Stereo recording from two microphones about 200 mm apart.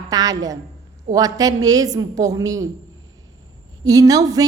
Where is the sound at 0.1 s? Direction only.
20° right (ahead or behind).